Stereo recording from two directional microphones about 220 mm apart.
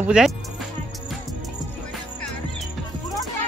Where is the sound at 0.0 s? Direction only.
5° right (ahead or behind).